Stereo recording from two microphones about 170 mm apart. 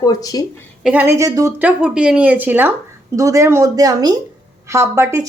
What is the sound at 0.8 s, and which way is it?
Speech, 10° right (ahead or behind).